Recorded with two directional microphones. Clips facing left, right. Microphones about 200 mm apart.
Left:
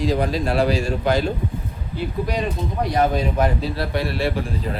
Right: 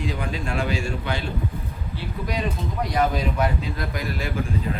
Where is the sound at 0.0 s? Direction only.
35° left (ahead or behind).